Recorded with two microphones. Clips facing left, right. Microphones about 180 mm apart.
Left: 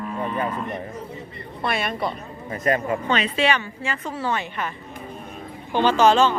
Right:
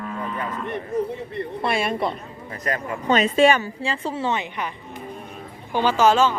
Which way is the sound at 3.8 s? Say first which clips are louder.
Right 2 dB; 30° right (ahead or behind).